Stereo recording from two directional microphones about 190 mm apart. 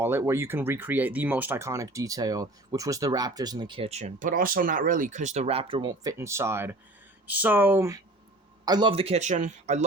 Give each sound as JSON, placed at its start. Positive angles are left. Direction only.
{"t": 0.0, "sound": "speech", "side_deg": -15}